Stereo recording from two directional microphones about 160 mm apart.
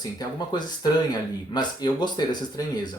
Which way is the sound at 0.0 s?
25° left (ahead or behind).